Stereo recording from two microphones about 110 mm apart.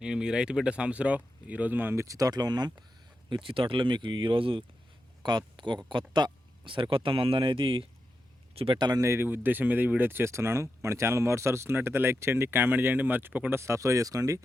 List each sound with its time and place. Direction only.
0.0 s speech: 5° right (ahead or behind); by 9.0 s 45° right (ahead or behind)
9.0 s speech: 25° right (ahead or behind)